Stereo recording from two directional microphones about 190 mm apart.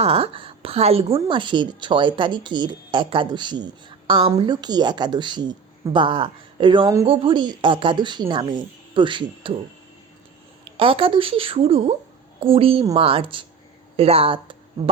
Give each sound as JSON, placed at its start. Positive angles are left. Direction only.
{"t": 0.0, "sound": "a woman's voice", "side_deg": -30}
{"t": 10.8, "sound": "a woman's voice", "side_deg": -30}